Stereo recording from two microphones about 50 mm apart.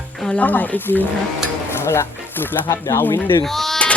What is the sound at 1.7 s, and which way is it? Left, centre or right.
Speech, left.